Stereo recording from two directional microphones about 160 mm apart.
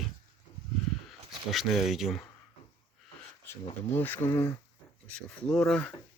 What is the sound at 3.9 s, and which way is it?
Speech, 15° left (ahead or behind).